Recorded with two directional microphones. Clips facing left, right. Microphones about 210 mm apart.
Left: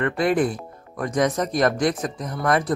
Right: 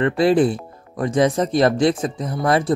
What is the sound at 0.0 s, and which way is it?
Speech, 30° right (ahead or behind).